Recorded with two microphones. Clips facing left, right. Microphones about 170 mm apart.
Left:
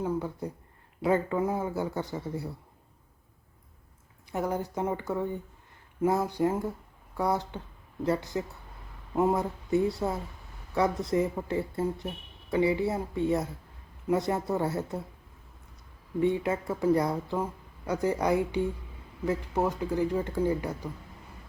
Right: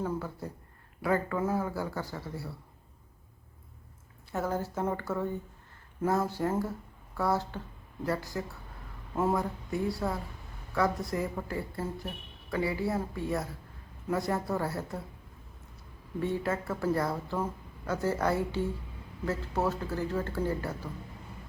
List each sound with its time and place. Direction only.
0.0 s speech: 15° left (ahead or behind)
4.3 s speech: 15° left (ahead or behind)
16.2 s speech: 15° left (ahead or behind)